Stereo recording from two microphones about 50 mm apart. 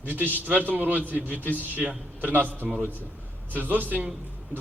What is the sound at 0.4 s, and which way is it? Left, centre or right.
A man's voice, right.